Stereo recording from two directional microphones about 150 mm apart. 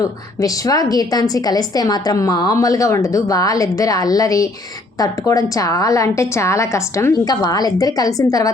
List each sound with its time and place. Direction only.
0.0 s a woman's voice: 25° left (ahead or behind)